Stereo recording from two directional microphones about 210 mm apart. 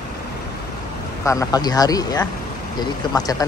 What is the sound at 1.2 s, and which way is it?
Speech, 15° left (ahead or behind).